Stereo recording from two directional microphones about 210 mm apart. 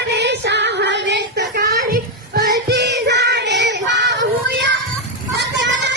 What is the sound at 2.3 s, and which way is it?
Music, 50° right (ahead or behind).